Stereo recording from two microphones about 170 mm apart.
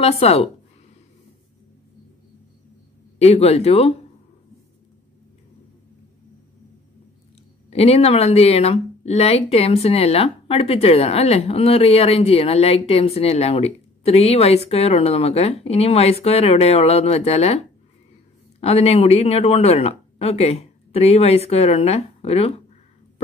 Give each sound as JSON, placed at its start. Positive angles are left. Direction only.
{"t": 0.0, "sound": "speech", "side_deg": 35}
{"t": 3.2, "sound": "speech", "side_deg": 40}
{"t": 7.7, "sound": "speech", "side_deg": 35}